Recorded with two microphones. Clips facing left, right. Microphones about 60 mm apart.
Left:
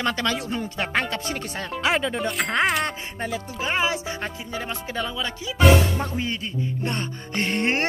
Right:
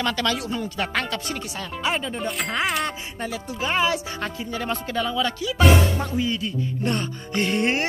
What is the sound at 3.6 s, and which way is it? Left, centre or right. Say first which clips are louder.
Speech: right 2 dB; left.